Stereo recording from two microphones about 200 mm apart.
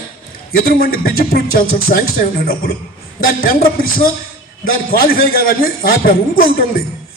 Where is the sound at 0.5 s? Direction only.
50° left (ahead or behind).